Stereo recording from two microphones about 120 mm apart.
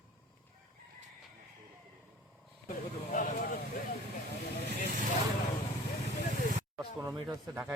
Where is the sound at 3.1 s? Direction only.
90° left.